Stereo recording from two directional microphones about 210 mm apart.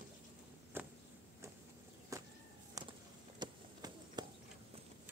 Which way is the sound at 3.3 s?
20° right (ahead or behind).